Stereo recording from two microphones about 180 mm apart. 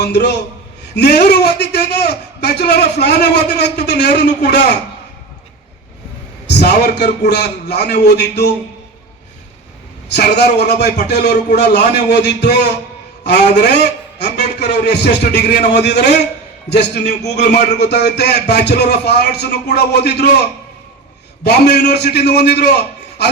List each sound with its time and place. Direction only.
0.0 s a man's voice: 70° left (ahead or behind)
6.5 s a man's voice: 70° left (ahead or behind)
10.1 s a man's voice: 65° left (ahead or behind)